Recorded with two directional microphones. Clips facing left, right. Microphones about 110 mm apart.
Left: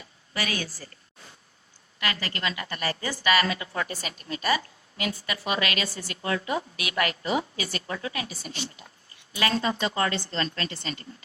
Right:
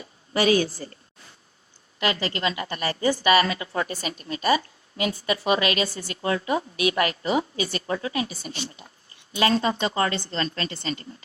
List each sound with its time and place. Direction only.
0.3 s a woman's voice: 25° right (ahead or behind)
2.0 s a woman's voice: 25° right (ahead or behind)